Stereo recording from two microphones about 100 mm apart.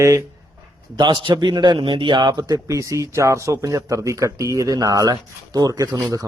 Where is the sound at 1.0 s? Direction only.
50° right (ahead or behind).